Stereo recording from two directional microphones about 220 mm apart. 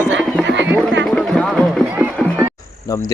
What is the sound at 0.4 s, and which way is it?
Music, 55° right (ahead or behind).